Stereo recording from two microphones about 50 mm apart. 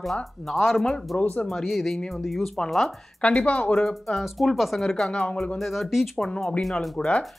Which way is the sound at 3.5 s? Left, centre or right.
Left.